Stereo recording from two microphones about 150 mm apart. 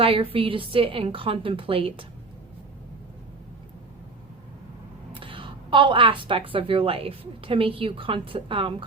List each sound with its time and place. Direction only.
0.0 s a woman's voice: 40° right (ahead or behind)
5.1 s a woman's voice: 35° right (ahead or behind)